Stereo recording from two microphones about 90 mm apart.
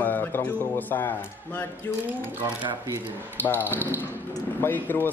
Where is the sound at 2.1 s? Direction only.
20° right (ahead or behind).